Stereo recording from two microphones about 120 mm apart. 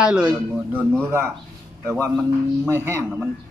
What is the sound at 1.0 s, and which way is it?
Speech, 20° right (ahead or behind).